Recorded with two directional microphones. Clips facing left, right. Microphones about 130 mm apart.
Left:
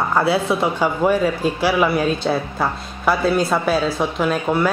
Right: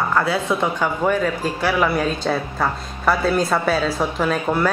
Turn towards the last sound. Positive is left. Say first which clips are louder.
# left 1 dB
turn(degrees=5)  # may be behind; listen again after turning